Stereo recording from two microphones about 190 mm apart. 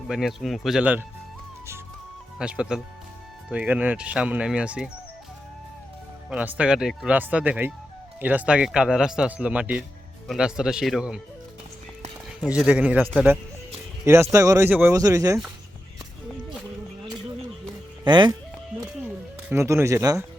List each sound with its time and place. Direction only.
0.1 s speech: centre (ahead or behind)
2.4 s speech: 5° right (ahead or behind)
6.3 s speech: 5° right (ahead or behind)
12.4 s speech: 5° right (ahead or behind)
18.0 s speech: 25° right (ahead or behind)
19.5 s speech: 15° right (ahead or behind)